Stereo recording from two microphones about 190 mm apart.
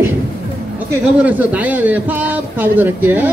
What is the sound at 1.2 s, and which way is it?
Speech, 10° right (ahead or behind).